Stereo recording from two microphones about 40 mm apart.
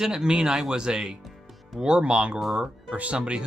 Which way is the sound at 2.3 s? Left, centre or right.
Centre.